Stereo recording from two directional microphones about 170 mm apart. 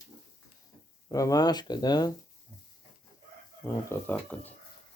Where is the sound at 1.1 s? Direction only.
20° left (ahead or behind).